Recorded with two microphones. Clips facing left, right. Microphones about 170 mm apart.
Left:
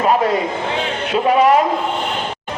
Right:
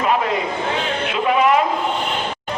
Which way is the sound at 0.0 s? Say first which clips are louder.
Left 4 dB; 40° left (ahead or behind).